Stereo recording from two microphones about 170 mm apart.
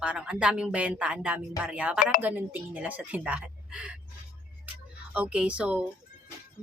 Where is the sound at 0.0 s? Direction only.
5° right (ahead or behind).